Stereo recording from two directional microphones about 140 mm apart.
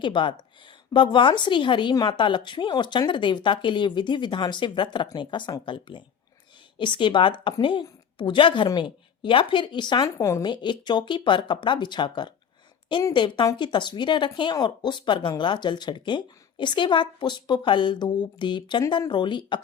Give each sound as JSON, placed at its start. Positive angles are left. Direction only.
{"t": 0.0, "sound": "speech", "side_deg": 35}
{"t": 10.5, "sound": "speech", "side_deg": 35}